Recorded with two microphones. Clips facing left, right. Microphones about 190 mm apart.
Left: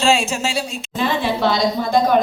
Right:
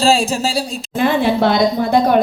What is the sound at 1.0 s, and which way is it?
A woman's voice, 55° right (ahead or behind).